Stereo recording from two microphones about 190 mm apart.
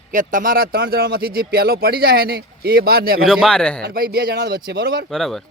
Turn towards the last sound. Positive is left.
turn(degrees=0)  # may be behind; listen again after turning